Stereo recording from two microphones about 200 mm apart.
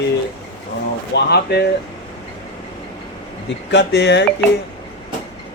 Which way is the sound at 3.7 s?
60° left (ahead or behind).